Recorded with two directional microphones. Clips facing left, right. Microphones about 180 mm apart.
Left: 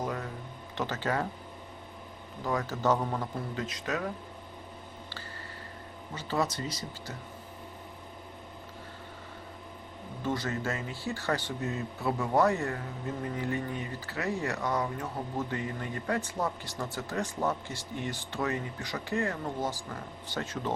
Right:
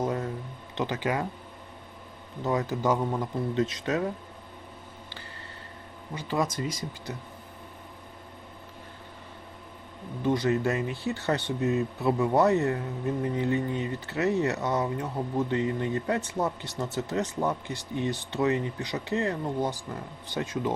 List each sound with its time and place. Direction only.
0.0 s a sound: 25° right (ahead or behind)
0.8 s speech: 15° right (ahead or behind)
2.4 s speech: 20° right (ahead or behind)
3.5 s speech: 25° right (ahead or behind)
6.1 s speech: 10° right (ahead or behind)
10.2 s speech: 15° right (ahead or behind)